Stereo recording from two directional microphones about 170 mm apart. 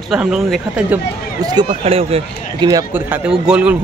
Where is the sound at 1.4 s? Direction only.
30° right (ahead or behind).